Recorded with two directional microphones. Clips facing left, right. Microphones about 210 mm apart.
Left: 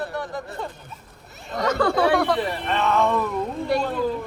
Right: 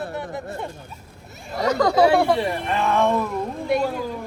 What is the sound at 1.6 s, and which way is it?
Speech, 35° right (ahead or behind).